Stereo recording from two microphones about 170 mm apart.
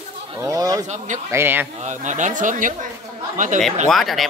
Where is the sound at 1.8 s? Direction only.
45° right (ahead or behind).